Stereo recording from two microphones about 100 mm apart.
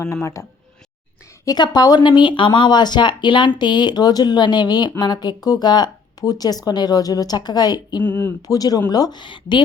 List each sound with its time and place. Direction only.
0.0 s speech: 30° left (ahead or behind)
1.5 s speech: 45° left (ahead or behind)
8.0 s speech: 15° left (ahead or behind)
8.4 s speech: 40° left (ahead or behind)